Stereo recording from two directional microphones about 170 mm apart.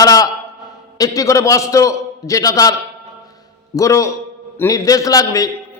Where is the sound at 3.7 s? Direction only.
20° left (ahead or behind).